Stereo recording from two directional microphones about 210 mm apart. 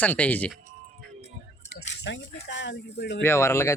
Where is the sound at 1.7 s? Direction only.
55° left (ahead or behind).